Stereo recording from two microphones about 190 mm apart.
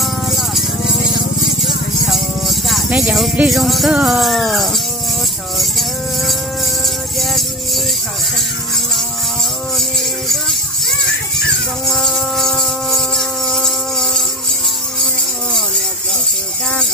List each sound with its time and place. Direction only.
0.0 s music: centre (ahead or behind)
9.8 s music: centre (ahead or behind)
11.9 s insect: centre (ahead or behind)